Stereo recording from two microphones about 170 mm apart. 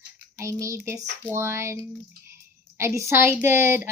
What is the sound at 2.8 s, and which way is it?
Speech, 15° right (ahead or behind).